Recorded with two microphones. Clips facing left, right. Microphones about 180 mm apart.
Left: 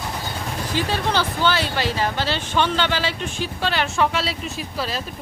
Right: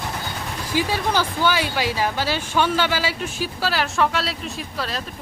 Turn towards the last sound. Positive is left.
turn(degrees=0)  # may be behind; listen again after turning